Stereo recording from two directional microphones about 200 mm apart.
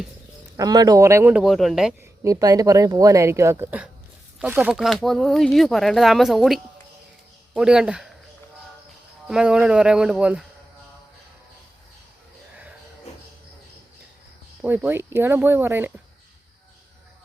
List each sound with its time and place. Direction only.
0.5 s speech: 20° right (ahead or behind); by 2.0 s centre (ahead or behind)
2.2 s speech: 15° right (ahead or behind)
9.2 s speech: 5° right (ahead or behind)
14.6 s speech: 10° right (ahead or behind)